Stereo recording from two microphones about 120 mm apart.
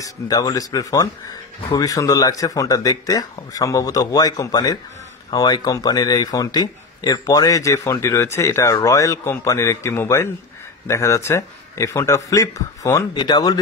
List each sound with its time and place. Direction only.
0.0 s speech: 30° left (ahead or behind)